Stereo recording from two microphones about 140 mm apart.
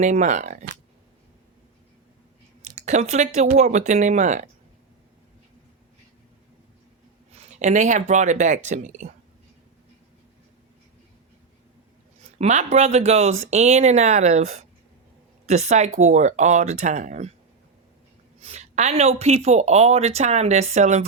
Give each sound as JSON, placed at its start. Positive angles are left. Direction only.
{"t": 0.0, "sound": "speech", "side_deg": -55}
{"t": 2.6, "sound": "speech", "side_deg": -55}
{"t": 7.3, "sound": "speech", "side_deg": -55}
{"t": 12.4, "sound": "speech", "side_deg": -55}
{"t": 18.3, "sound": "speech", "side_deg": -50}